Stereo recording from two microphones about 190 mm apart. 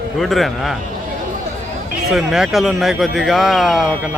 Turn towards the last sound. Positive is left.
turn(degrees=0)  # may be behind; listen again after turning